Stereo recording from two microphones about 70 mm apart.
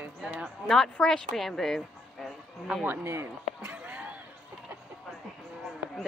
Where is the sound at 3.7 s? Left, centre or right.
Centre.